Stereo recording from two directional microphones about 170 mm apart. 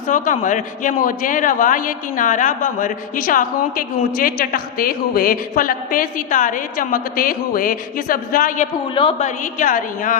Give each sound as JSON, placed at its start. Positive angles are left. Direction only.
{"t": 0.1, "sound": "a woman's voice", "side_deg": 50}